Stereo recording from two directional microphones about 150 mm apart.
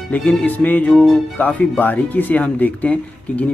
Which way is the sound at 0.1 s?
5° left (ahead or behind).